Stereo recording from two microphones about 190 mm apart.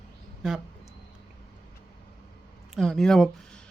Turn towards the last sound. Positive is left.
turn(degrees=5)  # may be behind; listen again after turning